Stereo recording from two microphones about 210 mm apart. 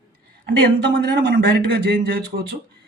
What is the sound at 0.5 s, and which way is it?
Speech, 50° right (ahead or behind).